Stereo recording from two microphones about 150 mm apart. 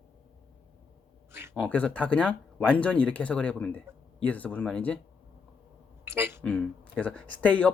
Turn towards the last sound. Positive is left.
turn(degrees=10)  # may be behind; listen again after turning